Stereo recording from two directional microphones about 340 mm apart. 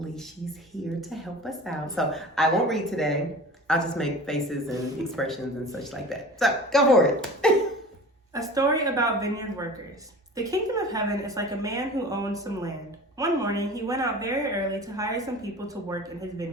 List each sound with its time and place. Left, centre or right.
1.1 s speech: centre
8.3 s a woman's voice: centre